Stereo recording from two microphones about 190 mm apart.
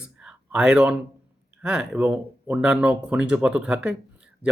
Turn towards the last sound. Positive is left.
turn(degrees=-5)  # may be behind; listen again after turning